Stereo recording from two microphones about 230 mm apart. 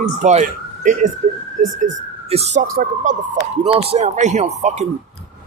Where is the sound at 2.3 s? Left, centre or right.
Right.